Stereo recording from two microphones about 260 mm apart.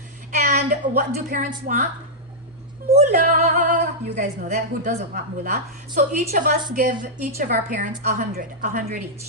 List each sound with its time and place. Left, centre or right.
0.3 s a woman's voice: right
2.9 s a woman's voice: right